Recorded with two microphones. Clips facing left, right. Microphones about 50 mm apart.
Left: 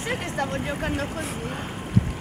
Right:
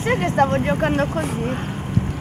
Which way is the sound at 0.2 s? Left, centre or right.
Right.